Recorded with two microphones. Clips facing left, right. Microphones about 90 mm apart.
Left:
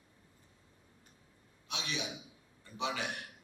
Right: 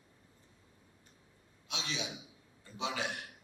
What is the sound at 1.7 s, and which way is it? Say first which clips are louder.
A man's voice: left 1 dB; 20° right (ahead or behind).